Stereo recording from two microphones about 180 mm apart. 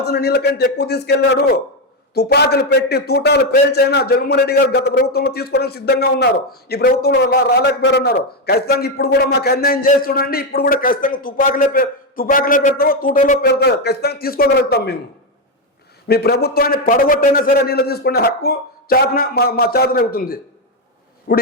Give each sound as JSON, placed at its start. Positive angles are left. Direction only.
{"t": 0.0, "sound": "a man's voice", "side_deg": 65}
{"t": 13.4, "sound": "a man's voice", "side_deg": 65}
{"t": 16.0, "sound": "a man's voice", "side_deg": 65}